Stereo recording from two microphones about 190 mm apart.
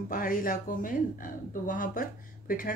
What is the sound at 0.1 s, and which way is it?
A woman's voice, 50° left (ahead or behind).